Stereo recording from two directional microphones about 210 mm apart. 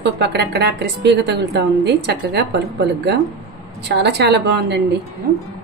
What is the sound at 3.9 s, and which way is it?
Speech, 55° right (ahead or behind).